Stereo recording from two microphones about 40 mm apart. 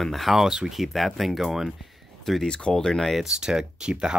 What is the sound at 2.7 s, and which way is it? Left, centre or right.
Speech, centre.